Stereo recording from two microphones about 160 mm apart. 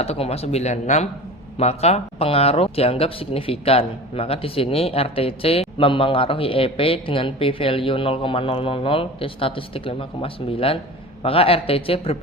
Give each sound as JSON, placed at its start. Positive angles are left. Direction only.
{"t": 0.0, "sound": "speech", "side_deg": 40}